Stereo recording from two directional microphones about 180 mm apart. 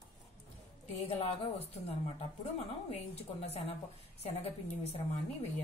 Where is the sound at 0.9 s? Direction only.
35° left (ahead or behind).